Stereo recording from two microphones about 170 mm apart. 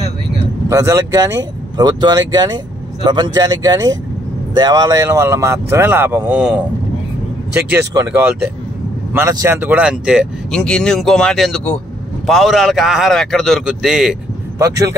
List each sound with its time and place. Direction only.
0.7 s speech: 15° right (ahead or behind)
10.5 s a man's voice: 5° left (ahead or behind)
14.6 s speech: 20° right (ahead or behind)